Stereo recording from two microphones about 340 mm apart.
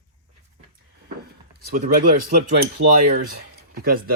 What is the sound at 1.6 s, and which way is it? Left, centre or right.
Speech, right.